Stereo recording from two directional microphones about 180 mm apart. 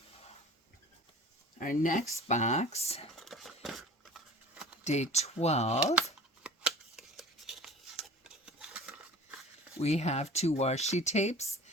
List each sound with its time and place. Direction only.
1.5 s speech: 45° left (ahead or behind)
3.2 s a sound: centre (ahead or behind)
4.8 s speech: 40° left (ahead or behind)
5.8 s speech: 5° right (ahead or behind)
6.4 s a sound: 5° right (ahead or behind)
9.8 s speech: 35° left (ahead or behind)